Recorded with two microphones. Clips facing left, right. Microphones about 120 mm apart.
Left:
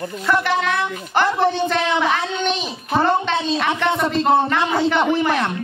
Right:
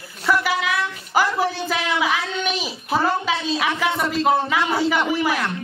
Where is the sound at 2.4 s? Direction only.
5° right (ahead or behind).